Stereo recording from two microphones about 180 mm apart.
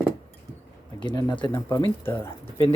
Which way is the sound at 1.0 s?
25° left (ahead or behind).